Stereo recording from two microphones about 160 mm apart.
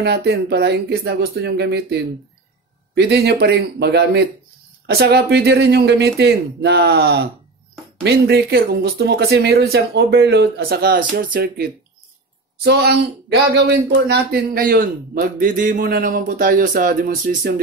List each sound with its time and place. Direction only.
0.0 s speech: 90° right
8.0 s speech: 80° right
12.6 s speech: 90° right; by 17.6 s 65° right (ahead or behind)